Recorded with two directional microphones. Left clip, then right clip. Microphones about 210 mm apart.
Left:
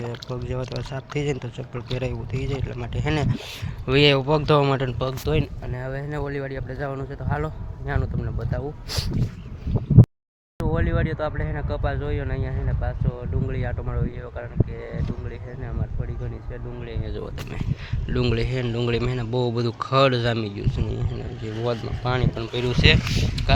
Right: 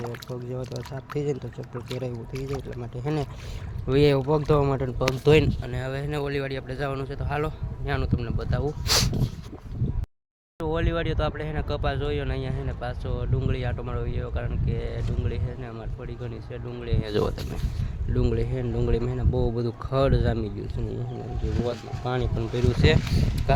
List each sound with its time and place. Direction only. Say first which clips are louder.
0.0 s speech: left 2 dB; 5° right (ahead or behind)
5.2 s speech: right 8 dB; 55° right (ahead or behind)
5.6 s speech: even; 10° right (ahead or behind)
8.9 s speech: right 9 dB; 45° right (ahead or behind)
10.6 s speech: left 1 dB; centre (ahead or behind)
17.0 s speech: right 11 dB; 50° right (ahead or behind)
18.1 s speech: left 3 dB; centre (ahead or behind)